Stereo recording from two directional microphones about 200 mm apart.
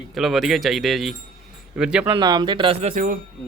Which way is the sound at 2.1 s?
20° right (ahead or behind).